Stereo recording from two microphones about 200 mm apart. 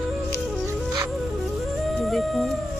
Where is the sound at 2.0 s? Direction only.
Centre (ahead or behind).